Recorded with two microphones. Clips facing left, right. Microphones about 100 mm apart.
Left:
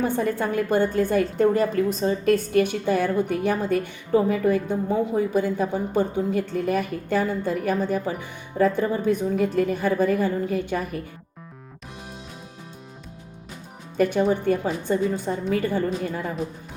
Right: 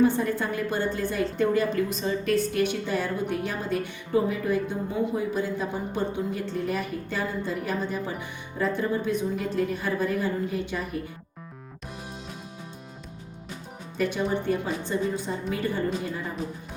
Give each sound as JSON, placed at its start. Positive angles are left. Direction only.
{"t": 0.0, "sound": "a woman's voice", "side_deg": 50}
{"t": 13.9, "sound": "a woman's voice", "side_deg": 50}